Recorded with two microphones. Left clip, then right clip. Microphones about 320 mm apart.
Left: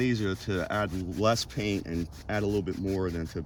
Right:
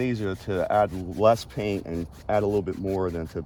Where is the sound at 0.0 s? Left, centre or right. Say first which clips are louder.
Right 1 dB; centre.